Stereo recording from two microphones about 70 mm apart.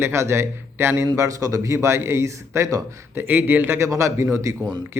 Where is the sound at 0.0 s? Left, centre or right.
Right.